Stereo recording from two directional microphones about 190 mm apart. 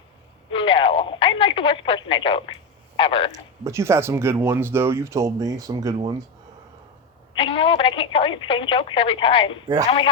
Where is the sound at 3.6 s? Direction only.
15° right (ahead or behind).